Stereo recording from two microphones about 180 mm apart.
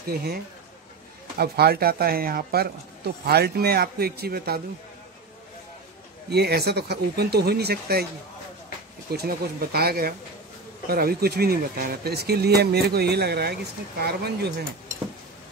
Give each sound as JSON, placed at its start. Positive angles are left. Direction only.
{"t": 0.0, "sound": "speech", "side_deg": -60}
{"t": 1.4, "sound": "speech", "side_deg": -60}
{"t": 6.3, "sound": "speech", "side_deg": -65}
{"t": 9.1, "sound": "speech", "side_deg": -60}